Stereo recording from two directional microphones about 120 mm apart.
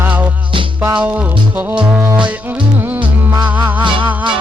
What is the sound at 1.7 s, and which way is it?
Music, 15° right (ahead or behind).